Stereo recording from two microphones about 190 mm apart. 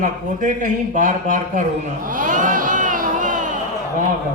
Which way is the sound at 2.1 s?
40° right (ahead or behind).